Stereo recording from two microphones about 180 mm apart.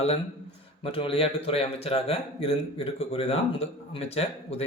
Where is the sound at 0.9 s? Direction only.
30° left (ahead or behind).